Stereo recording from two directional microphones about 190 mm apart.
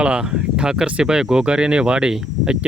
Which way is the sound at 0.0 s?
5° right (ahead or behind).